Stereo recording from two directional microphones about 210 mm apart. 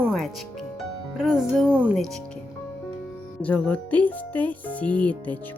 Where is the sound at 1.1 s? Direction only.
5° right (ahead or behind).